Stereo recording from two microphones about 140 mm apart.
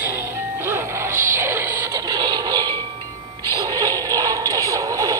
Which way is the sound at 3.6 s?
25° right (ahead or behind).